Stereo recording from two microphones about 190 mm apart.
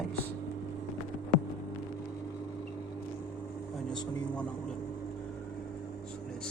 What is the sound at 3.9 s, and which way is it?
Speech, 5° left (ahead or behind).